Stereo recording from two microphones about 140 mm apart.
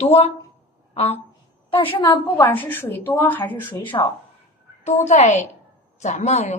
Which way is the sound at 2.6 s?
15° left (ahead or behind).